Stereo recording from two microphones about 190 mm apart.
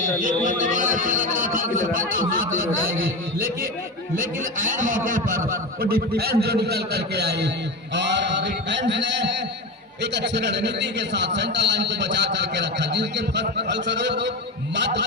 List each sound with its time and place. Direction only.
0.0 s a man's voice: 45° right (ahead or behind); by 15.0 s 65° right (ahead or behind)